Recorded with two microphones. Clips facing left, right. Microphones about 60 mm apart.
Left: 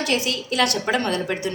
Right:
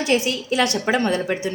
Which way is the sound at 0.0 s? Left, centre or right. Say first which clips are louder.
Right 3 dB; right.